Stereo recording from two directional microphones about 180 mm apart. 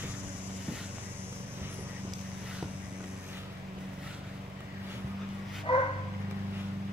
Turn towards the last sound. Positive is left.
turn(degrees=30)  # may be behind; listen again after turning